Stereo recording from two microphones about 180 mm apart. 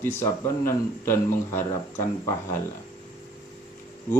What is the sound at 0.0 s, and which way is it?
Speech, 15° left (ahead or behind).